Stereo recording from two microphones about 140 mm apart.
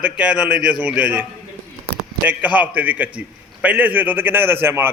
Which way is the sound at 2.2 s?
10° right (ahead or behind).